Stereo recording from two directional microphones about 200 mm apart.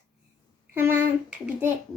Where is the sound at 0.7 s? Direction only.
10° right (ahead or behind).